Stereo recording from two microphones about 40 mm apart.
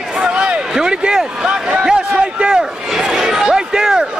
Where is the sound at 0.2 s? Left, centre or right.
Right.